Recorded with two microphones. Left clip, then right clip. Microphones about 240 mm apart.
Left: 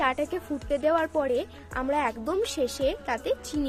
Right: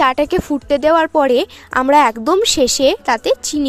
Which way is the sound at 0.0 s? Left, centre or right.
Right.